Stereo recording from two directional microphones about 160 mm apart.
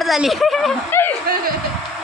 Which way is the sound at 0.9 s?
15° left (ahead or behind).